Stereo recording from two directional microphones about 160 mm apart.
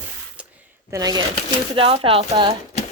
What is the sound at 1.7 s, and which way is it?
Speech, 35° right (ahead or behind).